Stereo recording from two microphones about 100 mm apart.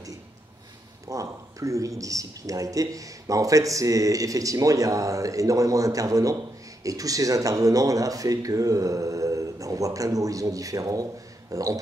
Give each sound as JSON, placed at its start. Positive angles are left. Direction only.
{"t": 1.0, "sound": "speech", "side_deg": -30}